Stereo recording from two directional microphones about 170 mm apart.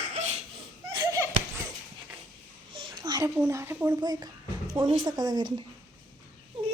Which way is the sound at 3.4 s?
15° right (ahead or behind).